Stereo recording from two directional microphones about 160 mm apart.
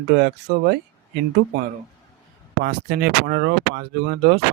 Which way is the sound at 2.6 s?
70° right (ahead or behind).